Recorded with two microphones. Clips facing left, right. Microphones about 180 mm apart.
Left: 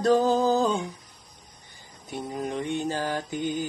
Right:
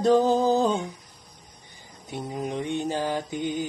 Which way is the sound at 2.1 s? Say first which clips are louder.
Even; 15° right (ahead or behind).